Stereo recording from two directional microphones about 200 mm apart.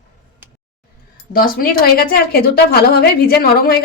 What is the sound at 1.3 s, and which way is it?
A woman's voice, 45° left (ahead or behind).